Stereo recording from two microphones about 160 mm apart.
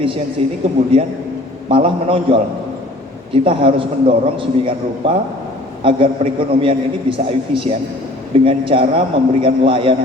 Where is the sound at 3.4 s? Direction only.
35° right (ahead or behind).